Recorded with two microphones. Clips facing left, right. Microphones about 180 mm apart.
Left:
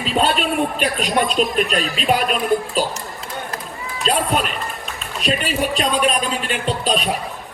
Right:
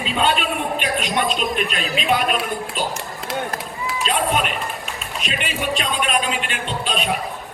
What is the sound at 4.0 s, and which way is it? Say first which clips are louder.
A man's voice: left 2 dB; 35° left (ahead or behind).